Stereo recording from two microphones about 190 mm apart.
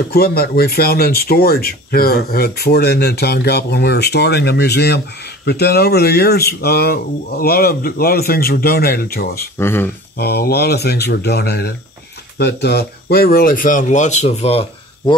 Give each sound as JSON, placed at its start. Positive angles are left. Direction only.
{"t": 0.1, "sound": "speech", "side_deg": 55}
{"t": 9.6, "sound": "speech", "side_deg": 10}
{"t": 10.1, "sound": "speech", "side_deg": 55}